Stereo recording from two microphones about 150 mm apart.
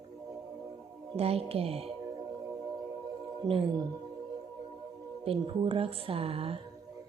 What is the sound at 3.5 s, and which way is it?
Speech, 25° right (ahead or behind).